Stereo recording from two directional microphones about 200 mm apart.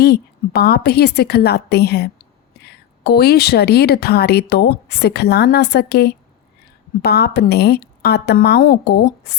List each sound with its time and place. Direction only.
0.0 s a woman's voice: 55° left (ahead or behind)